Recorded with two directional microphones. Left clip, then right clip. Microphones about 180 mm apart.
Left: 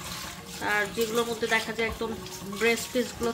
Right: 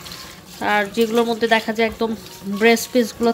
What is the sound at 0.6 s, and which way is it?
Speech, 60° right (ahead or behind).